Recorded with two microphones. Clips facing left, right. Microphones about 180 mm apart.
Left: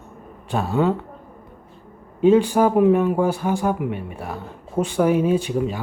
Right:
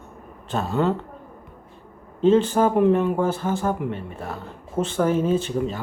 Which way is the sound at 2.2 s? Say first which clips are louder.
Left 2 dB; 10° left (ahead or behind).